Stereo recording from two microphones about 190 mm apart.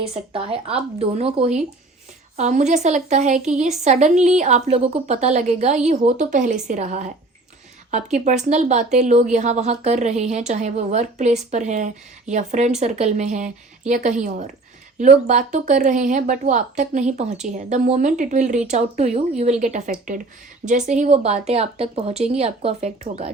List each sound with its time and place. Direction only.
0.1 s speech: 30° right (ahead or behind)